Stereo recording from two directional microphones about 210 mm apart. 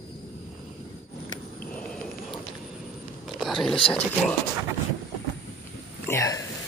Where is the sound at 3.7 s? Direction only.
30° left (ahead or behind).